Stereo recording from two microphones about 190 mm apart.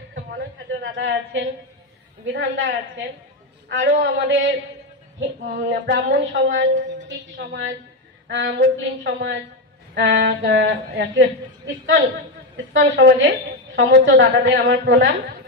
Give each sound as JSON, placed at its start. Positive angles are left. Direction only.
{"t": 0.1, "sound": "a sound", "side_deg": -65}
{"t": 2.3, "sound": "a woman's voice", "side_deg": -80}
{"t": 3.6, "sound": "a man's voice", "side_deg": -65}
{"t": 4.0, "sound": "a woman's voice", "side_deg": -75}